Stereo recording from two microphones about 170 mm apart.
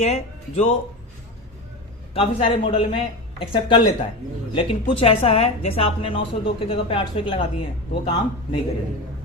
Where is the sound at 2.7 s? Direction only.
30° left (ahead or behind).